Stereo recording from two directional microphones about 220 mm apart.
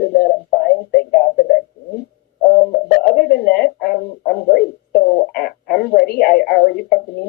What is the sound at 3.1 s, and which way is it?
Speech, 45° left (ahead or behind).